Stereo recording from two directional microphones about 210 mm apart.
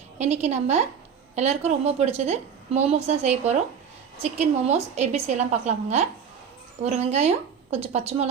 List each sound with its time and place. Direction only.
0.2 s a woman's voice: 30° right (ahead or behind)